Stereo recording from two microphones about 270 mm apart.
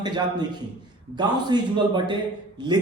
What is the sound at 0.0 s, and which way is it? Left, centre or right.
A man's voice, centre.